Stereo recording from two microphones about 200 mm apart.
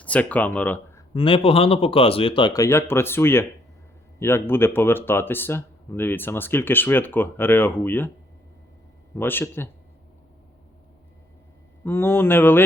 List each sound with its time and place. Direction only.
0.0 s speech: 5° left (ahead or behind)
1.1 s speech: 25° left (ahead or behind); by 8.1 s 10° left (ahead or behind)
9.1 s speech: 10° left (ahead or behind)
11.9 s speech: 10° left (ahead or behind)